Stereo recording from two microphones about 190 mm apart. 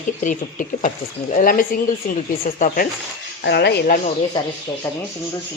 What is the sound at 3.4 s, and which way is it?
Speech, 60° left (ahead or behind).